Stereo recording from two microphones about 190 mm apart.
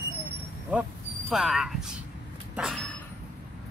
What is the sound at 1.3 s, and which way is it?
Speech, 5° right (ahead or behind).